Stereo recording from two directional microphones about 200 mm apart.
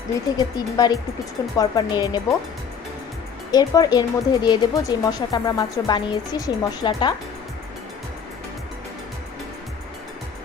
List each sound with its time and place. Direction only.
0.3 s speech: 20° left (ahead or behind)
3.5 s speech: 20° left (ahead or behind)